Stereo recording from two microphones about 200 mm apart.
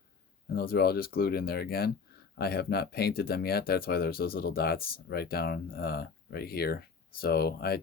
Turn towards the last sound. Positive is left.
turn(degrees=50)  # may be behind; listen again after turning